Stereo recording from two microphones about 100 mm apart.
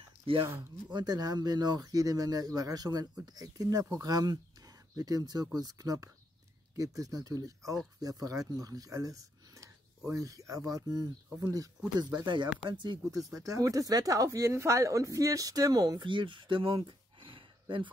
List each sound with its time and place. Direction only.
0.3 s speech: 65° right (ahead or behind)
0.9 s speech: 40° right (ahead or behind)
13.3 s speech: 35° right (ahead or behind)
16.0 s speech: 55° right (ahead or behind)